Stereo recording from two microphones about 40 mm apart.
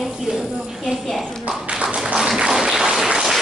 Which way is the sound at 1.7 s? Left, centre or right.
Right.